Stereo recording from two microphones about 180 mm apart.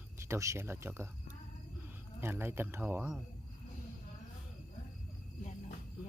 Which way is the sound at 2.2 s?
10° right (ahead or behind).